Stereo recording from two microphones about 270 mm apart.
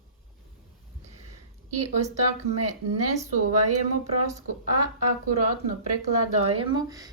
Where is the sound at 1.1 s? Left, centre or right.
Right.